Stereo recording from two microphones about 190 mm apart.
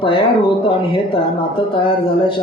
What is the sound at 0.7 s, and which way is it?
Speech, 30° left (ahead or behind).